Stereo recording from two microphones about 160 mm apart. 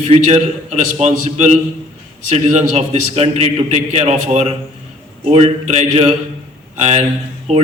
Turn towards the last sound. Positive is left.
turn(degrees=-45)  # may be behind; listen again after turning